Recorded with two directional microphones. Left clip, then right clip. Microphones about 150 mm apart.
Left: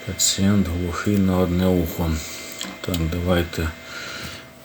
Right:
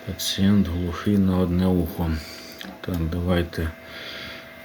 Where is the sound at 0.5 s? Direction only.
15° right (ahead or behind).